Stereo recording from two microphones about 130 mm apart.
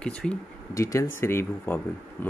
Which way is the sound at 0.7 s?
25° left (ahead or behind).